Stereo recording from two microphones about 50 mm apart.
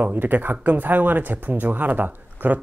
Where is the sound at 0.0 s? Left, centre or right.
Right.